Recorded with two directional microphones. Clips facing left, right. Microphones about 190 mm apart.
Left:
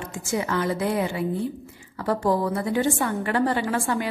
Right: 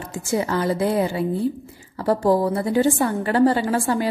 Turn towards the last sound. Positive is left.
turn(degrees=-35)  # may be behind; listen again after turning